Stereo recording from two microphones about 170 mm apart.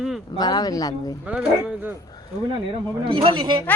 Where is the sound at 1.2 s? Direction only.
5° right (ahead or behind).